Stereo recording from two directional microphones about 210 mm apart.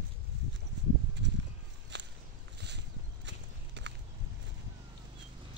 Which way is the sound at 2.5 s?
55° right (ahead or behind).